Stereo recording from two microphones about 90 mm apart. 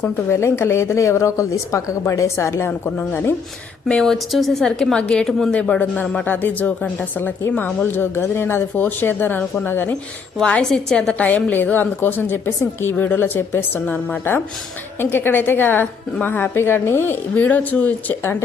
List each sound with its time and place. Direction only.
0.0 s a woman's voice: 30° left (ahead or behind)
2.8 s a woman's voice: 20° left (ahead or behind)
3.8 s a woman's voice: 5° left (ahead or behind); by 9.9 s 25° left (ahead or behind)
10.3 s a woman's voice: 10° left (ahead or behind)
18.2 s a woman's voice: 30° left (ahead or behind)